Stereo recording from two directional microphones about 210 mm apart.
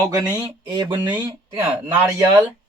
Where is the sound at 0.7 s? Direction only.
20° right (ahead or behind).